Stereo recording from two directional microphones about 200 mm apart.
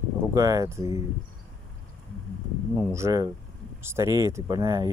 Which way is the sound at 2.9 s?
15° right (ahead or behind).